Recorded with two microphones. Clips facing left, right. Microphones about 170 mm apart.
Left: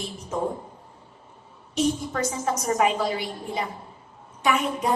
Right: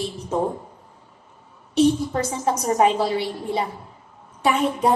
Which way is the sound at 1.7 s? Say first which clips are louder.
Right 6 dB; 30° right (ahead or behind).